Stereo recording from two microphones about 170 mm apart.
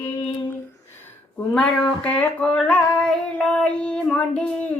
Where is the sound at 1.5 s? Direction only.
5° left (ahead or behind).